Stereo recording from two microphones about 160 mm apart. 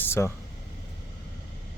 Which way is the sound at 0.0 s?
15° left (ahead or behind).